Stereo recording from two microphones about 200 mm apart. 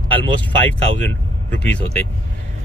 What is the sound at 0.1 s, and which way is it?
Speech, 5° left (ahead or behind).